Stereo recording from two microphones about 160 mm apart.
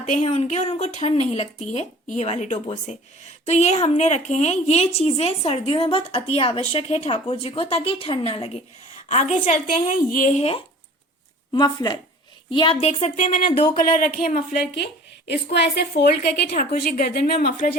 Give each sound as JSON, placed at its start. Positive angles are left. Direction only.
{"t": 0.0, "sound": "a woman's voice", "side_deg": 45}
{"t": 9.0, "sound": "speech", "side_deg": 50}
{"t": 11.5, "sound": "speech", "side_deg": 25}
{"t": 15.3, "sound": "a woman's voice", "side_deg": 90}
{"t": 16.5, "sound": "speech", "side_deg": 45}
{"t": 17.0, "sound": "speech", "side_deg": 65}